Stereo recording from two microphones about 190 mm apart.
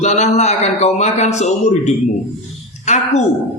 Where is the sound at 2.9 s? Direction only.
40° left (ahead or behind).